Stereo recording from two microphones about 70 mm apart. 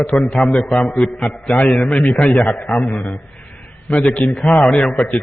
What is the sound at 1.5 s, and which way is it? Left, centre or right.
A man's voice, centre.